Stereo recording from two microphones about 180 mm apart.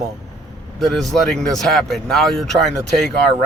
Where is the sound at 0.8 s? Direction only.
Centre (ahead or behind).